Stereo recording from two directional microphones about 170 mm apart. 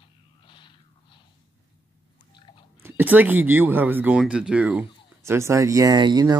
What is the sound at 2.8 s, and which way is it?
Speech, 10° right (ahead or behind).